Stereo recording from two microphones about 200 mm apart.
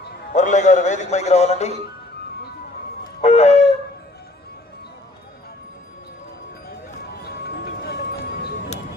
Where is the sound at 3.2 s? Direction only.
35° left (ahead or behind).